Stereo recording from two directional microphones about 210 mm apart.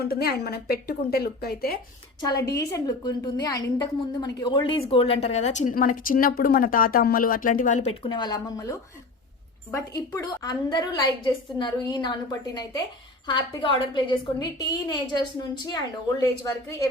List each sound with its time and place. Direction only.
0.0 s a woman's voice: 50° left (ahead or behind)
2.2 s a woman's voice: 15° left (ahead or behind)